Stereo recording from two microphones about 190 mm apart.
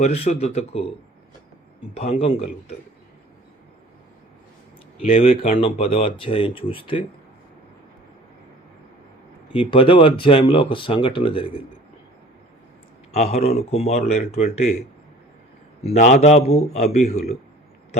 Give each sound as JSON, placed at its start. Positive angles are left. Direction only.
{"t": 0.0, "sound": "speech", "side_deg": 35}
{"t": 1.9, "sound": "speech", "side_deg": 30}
{"t": 5.0, "sound": "speech", "side_deg": 30}
{"t": 9.6, "sound": "speech", "side_deg": 30}
{"t": 13.1, "sound": "speech", "side_deg": 35}
{"t": 15.8, "sound": "speech", "side_deg": 35}